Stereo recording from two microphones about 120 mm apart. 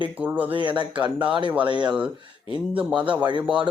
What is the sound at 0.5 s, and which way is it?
Speech, 40° right (ahead or behind).